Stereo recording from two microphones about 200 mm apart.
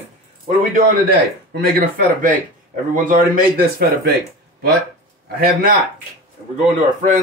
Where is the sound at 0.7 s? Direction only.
45° right (ahead or behind).